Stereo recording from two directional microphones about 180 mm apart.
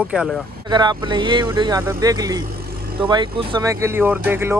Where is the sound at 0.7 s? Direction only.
25° right (ahead or behind).